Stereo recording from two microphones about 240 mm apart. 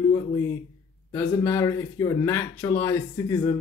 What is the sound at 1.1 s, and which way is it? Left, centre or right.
Speech, centre.